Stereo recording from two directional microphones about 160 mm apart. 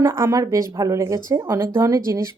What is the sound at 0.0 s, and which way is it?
Speech, 15° right (ahead or behind).